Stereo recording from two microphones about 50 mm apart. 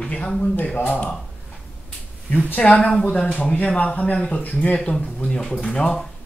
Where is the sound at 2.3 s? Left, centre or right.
Left; by 4.4 s centre.